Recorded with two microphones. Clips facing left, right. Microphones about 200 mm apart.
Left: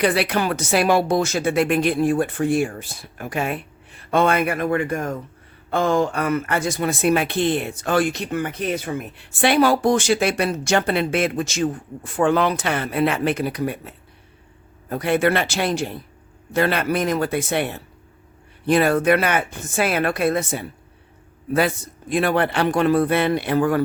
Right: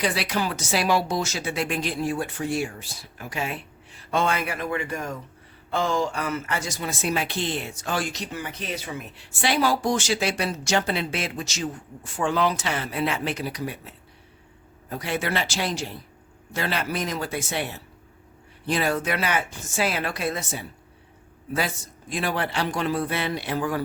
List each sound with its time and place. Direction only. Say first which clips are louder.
0.0 s speech: left 6 dB; 60° left (ahead or behind)
22.1 s speech: left 7 dB; 60° left (ahead or behind)